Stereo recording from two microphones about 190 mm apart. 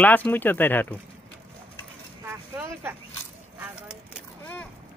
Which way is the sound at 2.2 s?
15° right (ahead or behind).